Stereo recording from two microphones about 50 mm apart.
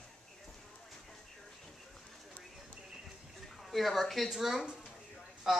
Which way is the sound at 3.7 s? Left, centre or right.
Centre.